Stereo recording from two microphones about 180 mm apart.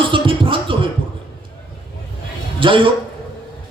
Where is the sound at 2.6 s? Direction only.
25° right (ahead or behind).